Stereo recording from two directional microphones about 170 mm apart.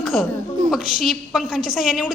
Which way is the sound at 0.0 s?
Centre (ahead or behind).